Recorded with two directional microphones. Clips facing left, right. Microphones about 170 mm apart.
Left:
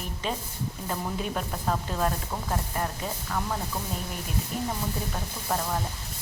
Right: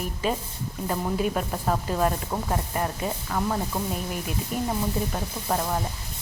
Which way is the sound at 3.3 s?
5° right (ahead or behind).